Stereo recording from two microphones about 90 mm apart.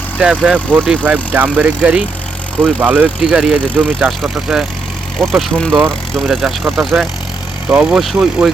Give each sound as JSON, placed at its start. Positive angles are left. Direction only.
{"t": 0.2, "sound": "speech", "side_deg": -10}
{"t": 4.2, "sound": "speech", "side_deg": -5}